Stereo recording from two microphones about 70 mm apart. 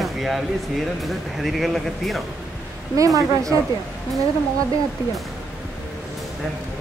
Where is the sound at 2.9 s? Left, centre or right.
Right.